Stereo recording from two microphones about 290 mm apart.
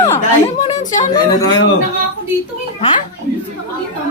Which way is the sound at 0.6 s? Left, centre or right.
Left.